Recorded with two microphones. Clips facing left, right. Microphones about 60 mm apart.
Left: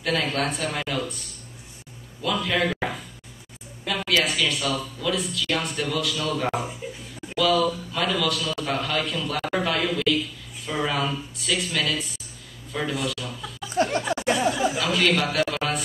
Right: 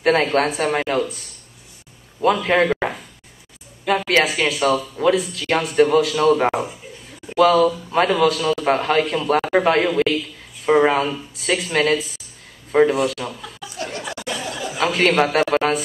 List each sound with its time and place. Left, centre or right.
0.0 s a man's voice: right
2.2 s a man's voice: right
13.3 s speech: right
13.6 s a sound: left
14.8 s a man's voice: right